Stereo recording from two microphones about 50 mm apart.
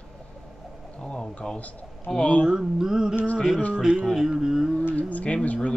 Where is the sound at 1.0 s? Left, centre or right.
Centre.